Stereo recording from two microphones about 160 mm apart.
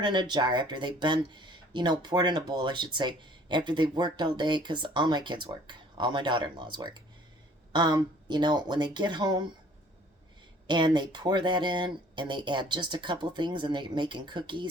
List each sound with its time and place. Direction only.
0.0 s speech: 30° right (ahead or behind)
10.7 s speech: 30° right (ahead or behind)